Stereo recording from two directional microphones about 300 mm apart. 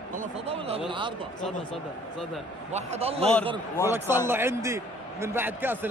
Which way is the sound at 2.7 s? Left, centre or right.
Right.